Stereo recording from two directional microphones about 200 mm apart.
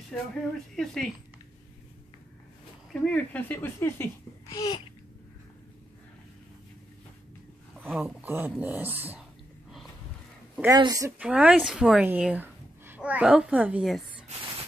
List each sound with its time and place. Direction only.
0.3 s speech: 5° left (ahead or behind)
2.9 s speech: 5° left (ahead or behind)
7.8 s speech: 5° right (ahead or behind)
10.5 s a sound: 10° right (ahead or behind)
10.8 s speech: 15° right (ahead or behind)
11.1 s speech: 5° right (ahead or behind)